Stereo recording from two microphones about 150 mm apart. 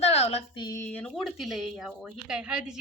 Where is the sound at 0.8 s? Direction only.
10° left (ahead or behind).